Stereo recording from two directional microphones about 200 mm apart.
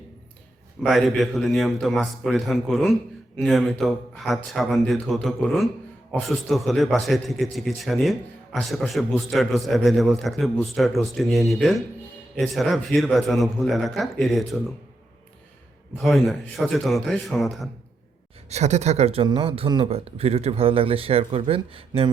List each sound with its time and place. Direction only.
0.8 s a man's voice: centre (ahead or behind)
16.0 s a man's voice: centre (ahead or behind)
18.4 s speech: 35° right (ahead or behind)